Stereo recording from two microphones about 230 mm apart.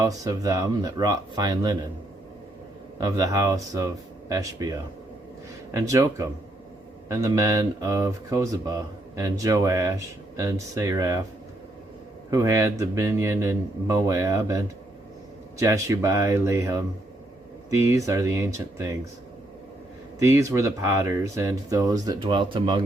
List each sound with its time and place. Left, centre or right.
0.0 s speech: centre
3.0 s speech: centre
12.3 s speech: centre
20.1 s speech: centre